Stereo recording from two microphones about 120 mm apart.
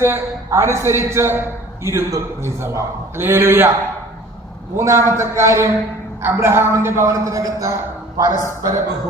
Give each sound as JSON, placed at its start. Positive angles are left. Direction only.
{"t": 0.0, "sound": "a man's voice", "side_deg": -20}
{"t": 4.8, "sound": "a man's voice", "side_deg": -20}